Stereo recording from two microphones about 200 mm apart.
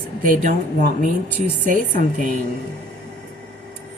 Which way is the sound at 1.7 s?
40° right (ahead or behind).